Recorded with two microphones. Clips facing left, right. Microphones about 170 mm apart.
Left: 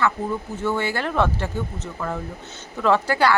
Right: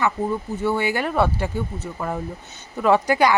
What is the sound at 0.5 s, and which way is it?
Speech, 15° right (ahead or behind).